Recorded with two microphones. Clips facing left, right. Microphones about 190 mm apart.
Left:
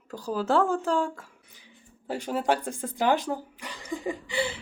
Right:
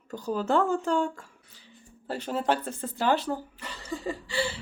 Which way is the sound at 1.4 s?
15° left (ahead or behind).